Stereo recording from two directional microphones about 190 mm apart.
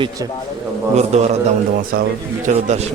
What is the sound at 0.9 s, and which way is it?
Speech, 35° right (ahead or behind).